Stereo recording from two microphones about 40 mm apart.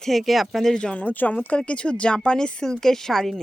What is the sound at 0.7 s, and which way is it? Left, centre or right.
Speech, left.